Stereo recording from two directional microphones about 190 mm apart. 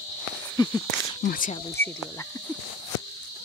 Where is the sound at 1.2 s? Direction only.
50° left (ahead or behind).